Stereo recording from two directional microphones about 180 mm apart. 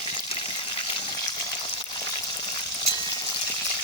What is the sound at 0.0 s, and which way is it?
Water, 30° left (ahead or behind).